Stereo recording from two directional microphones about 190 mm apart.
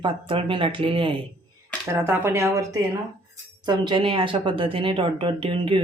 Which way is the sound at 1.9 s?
15° right (ahead or behind).